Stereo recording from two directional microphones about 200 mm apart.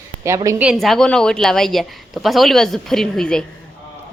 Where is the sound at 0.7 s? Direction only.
Centre (ahead or behind).